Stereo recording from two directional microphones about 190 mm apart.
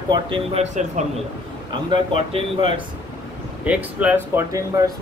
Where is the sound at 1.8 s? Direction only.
30° right (ahead or behind).